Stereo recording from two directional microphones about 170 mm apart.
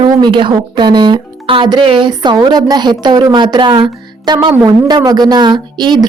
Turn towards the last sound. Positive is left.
turn(degrees=-25)  # may be behind; listen again after turning